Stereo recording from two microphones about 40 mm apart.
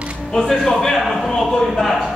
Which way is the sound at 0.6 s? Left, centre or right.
Centre.